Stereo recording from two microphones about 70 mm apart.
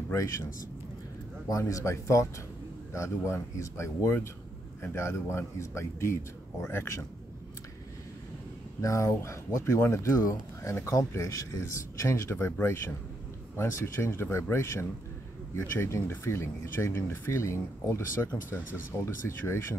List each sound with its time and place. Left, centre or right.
0.1 s speech: left
1.7 s speech: left
8.8 s speech: left